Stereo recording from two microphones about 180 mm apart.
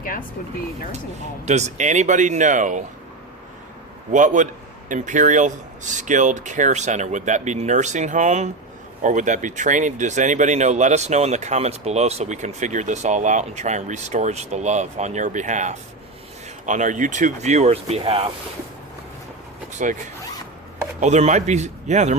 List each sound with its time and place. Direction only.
1.5 s speech: 40° right (ahead or behind)
4.1 s speech: 45° right (ahead or behind)
19.8 s speech: 45° right (ahead or behind)
21.0 s speech: 40° right (ahead or behind)